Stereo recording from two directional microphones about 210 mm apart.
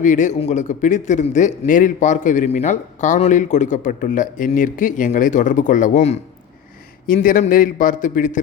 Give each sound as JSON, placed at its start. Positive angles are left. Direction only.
{"t": 0.0, "sound": "a man's voice", "side_deg": 35}